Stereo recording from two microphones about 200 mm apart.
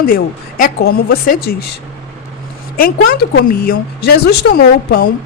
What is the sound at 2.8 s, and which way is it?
A woman's voice, 50° left (ahead or behind).